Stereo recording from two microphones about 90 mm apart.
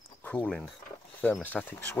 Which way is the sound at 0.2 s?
15° left (ahead or behind).